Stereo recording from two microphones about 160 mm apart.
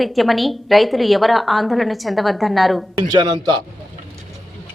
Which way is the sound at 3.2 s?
25° right (ahead or behind).